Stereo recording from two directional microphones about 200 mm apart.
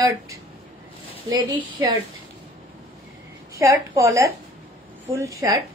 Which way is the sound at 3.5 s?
15° right (ahead or behind).